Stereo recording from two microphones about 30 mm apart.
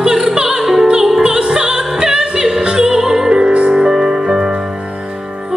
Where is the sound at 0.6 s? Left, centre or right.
Centre.